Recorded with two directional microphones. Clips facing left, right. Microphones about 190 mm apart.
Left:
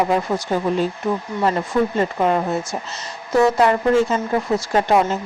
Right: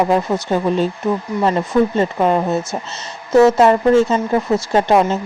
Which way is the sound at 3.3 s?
25° right (ahead or behind).